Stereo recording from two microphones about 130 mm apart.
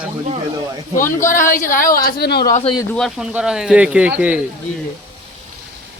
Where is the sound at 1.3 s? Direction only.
85° left.